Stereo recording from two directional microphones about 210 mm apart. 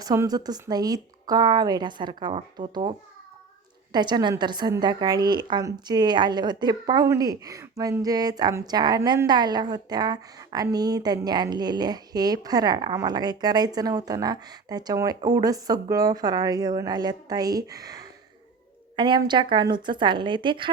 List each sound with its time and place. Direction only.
0.0 s a woman's voice: 15° right (ahead or behind)
3.9 s a woman's voice: 20° right (ahead or behind)